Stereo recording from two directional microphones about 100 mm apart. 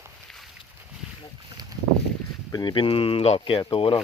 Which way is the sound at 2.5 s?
45° left (ahead or behind).